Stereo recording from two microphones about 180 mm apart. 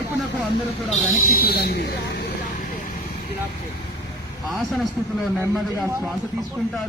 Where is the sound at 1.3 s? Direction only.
55° left (ahead or behind).